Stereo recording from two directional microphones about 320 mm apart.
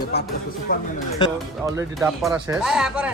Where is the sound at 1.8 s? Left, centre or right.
Centre.